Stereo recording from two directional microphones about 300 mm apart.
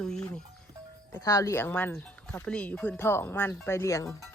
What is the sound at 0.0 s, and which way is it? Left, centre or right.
Music, centre.